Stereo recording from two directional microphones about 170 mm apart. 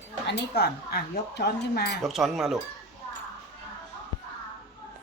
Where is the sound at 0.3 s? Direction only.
70° left (ahead or behind).